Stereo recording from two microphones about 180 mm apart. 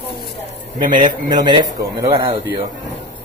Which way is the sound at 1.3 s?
25° right (ahead or behind).